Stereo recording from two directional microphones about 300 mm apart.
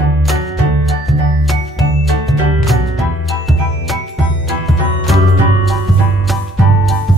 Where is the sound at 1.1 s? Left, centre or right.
Centre.